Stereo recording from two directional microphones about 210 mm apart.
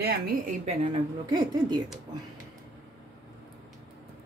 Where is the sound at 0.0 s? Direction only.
45° right (ahead or behind).